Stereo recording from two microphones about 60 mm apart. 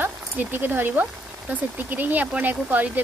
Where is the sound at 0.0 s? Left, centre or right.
Right.